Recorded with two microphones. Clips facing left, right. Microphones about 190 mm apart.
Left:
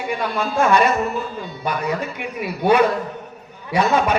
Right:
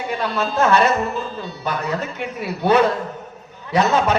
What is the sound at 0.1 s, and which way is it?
A man's voice, 10° left (ahead or behind).